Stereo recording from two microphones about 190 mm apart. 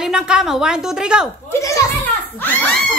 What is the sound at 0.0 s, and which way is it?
A woman's voice, 5° right (ahead or behind).